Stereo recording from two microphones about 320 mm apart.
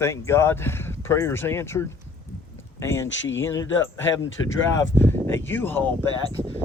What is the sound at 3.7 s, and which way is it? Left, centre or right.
Speech, left.